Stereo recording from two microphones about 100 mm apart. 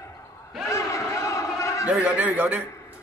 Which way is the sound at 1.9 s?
15° right (ahead or behind).